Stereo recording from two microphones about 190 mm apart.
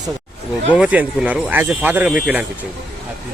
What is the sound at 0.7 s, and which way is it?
Speech, 5° right (ahead or behind).